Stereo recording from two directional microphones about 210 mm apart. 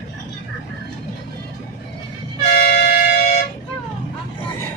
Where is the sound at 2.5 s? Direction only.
45° left (ahead or behind).